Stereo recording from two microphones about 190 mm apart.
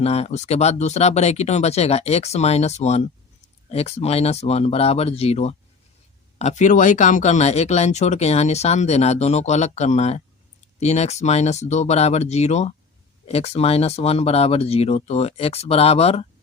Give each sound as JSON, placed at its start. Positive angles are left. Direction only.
{"t": 0.0, "sound": "speech", "side_deg": 35}